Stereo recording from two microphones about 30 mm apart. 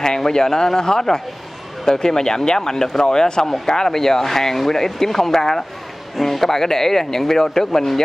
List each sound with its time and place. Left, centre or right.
0.0 s a man's voice: left